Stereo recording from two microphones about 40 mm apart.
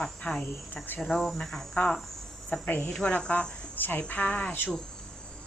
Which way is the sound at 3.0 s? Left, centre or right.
Left.